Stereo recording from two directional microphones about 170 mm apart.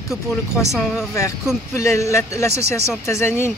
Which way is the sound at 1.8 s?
15° left (ahead or behind).